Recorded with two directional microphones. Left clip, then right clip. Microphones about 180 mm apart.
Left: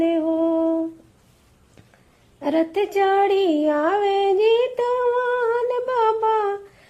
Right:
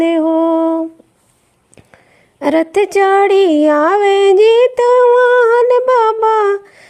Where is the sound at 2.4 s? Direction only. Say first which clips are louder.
Right 8 dB; 40° right (ahead or behind).